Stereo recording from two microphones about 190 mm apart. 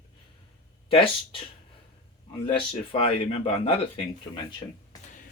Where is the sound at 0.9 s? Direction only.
30° left (ahead or behind).